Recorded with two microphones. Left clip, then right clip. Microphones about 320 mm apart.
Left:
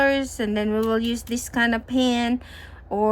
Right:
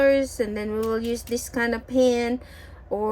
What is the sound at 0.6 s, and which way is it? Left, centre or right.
Speech, left.